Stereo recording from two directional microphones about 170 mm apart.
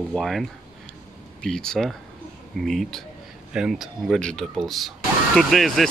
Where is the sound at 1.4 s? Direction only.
5° left (ahead or behind).